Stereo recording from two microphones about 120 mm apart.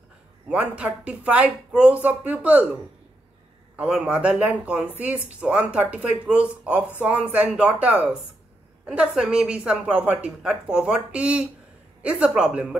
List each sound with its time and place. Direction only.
0.5 s speech: 10° right (ahead or behind)
3.7 s speech: 10° right (ahead or behind)